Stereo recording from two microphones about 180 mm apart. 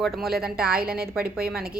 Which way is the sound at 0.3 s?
55° right (ahead or behind).